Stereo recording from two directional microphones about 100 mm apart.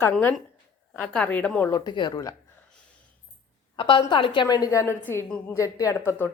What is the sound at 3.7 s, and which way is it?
Speech, 60° left (ahead or behind).